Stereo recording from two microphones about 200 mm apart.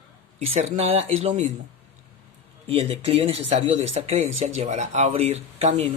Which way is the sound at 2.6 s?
30° right (ahead or behind).